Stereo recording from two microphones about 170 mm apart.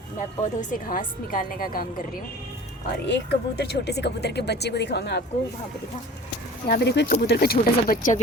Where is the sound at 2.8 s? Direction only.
80° left.